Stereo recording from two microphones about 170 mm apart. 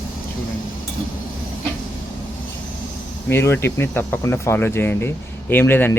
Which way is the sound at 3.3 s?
15° left (ahead or behind).